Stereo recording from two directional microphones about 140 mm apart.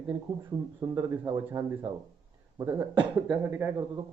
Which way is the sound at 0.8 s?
25° right (ahead or behind).